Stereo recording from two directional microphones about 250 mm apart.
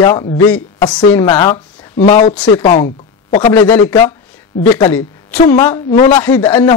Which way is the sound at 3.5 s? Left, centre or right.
Centre.